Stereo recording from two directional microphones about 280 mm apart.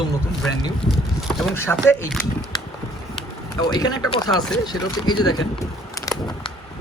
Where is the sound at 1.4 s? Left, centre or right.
Centre.